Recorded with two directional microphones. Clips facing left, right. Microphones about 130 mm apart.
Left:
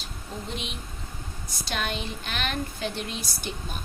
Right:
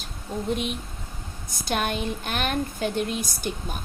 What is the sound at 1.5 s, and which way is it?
Speech, 50° right (ahead or behind).